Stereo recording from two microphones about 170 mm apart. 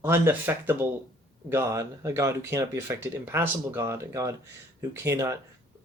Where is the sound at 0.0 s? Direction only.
15° right (ahead or behind).